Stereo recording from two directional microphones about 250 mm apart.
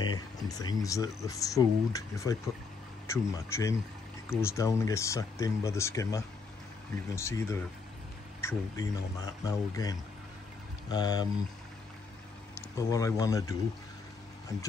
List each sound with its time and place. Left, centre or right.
0.0 s speech: centre
12.5 s speech: centre